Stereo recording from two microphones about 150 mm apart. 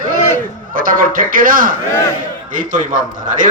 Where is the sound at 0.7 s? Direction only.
65° right (ahead or behind).